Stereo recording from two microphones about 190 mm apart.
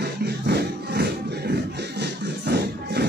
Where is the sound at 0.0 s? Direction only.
60° right (ahead or behind).